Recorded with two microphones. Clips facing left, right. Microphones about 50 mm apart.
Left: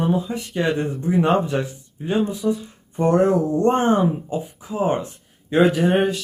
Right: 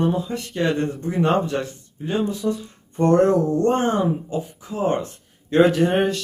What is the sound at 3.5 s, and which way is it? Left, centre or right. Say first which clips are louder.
Speech: left 2 dB; centre.